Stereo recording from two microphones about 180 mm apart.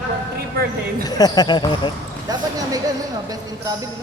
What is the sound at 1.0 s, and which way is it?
Speech, 20° left (ahead or behind).